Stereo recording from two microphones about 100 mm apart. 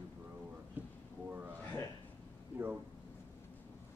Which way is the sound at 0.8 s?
20° right (ahead or behind).